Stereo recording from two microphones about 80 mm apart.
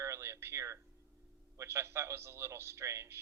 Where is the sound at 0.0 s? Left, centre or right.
Right.